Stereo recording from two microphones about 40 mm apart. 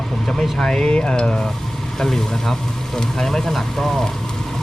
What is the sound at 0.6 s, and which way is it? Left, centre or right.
Speech, centre.